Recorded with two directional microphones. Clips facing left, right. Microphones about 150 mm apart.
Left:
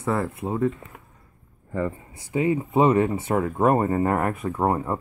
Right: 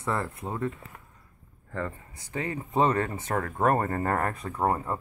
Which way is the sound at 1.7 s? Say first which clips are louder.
Left 7 dB; 15° left (ahead or behind).